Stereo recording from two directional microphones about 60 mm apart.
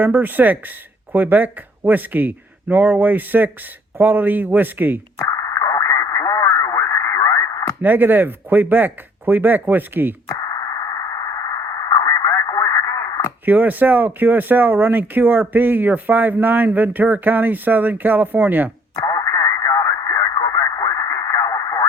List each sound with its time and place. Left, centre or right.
0.0 s speech: right
5.3 s sidetone: left
7.8 s speech: right
10.3 s sidetone: left
13.4 s speech: right
19.0 s radio: left